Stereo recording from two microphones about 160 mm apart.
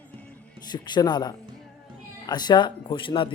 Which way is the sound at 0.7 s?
25° left (ahead or behind).